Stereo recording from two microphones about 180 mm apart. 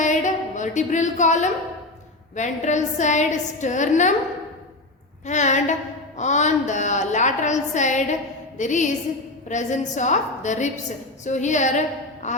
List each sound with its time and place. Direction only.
0.0 s music: 45° left (ahead or behind)
2.3 s a woman's voice: 40° left (ahead or behind)
5.2 s a woman's voice: 40° left (ahead or behind)